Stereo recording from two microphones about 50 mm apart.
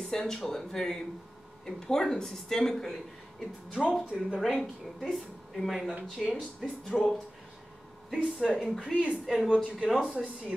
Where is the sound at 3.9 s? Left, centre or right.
Centre.